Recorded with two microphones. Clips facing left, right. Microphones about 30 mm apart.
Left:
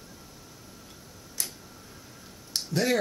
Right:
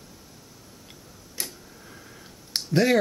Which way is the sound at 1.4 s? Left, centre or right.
Right.